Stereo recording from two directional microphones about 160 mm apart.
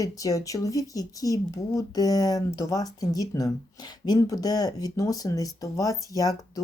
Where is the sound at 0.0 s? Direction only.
20° left (ahead or behind).